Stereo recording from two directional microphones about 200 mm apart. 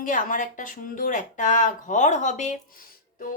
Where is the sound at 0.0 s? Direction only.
40° left (ahead or behind).